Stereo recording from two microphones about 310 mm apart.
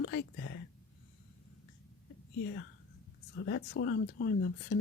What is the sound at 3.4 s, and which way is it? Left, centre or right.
Speech, left.